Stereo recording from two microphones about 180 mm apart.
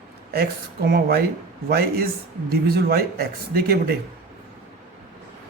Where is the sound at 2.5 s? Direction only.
60° right (ahead or behind).